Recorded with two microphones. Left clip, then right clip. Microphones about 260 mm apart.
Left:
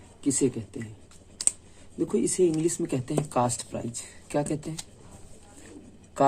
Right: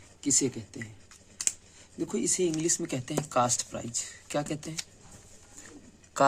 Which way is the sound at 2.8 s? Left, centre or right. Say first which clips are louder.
Left 4 dB; centre.